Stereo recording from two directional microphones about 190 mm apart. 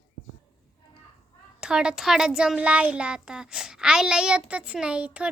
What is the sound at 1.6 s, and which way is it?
Child singing, 5° right (ahead or behind).